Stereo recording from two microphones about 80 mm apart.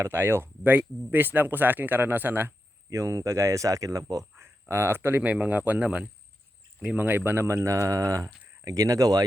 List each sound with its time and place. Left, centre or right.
0.0 s speech: right
2.9 s speech: right
4.7 s speech: right
5.2 s speech: centre
7.4 s speech: right